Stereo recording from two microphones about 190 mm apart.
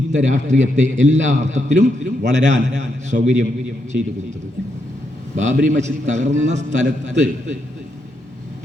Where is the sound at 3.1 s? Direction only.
50° right (ahead or behind).